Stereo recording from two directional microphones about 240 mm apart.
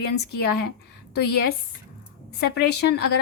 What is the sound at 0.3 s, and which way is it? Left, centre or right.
A woman's voice, left.